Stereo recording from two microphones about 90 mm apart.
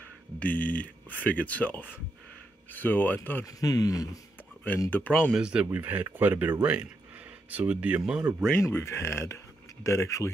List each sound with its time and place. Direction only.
0.4 s speech: 15° left (ahead or behind)
3.4 s speech: 45° left (ahead or behind)
4.9 s speech: 15° left (ahead or behind)
5.3 s speech: 10° right (ahead or behind)
8.6 s speech: 30° left (ahead or behind)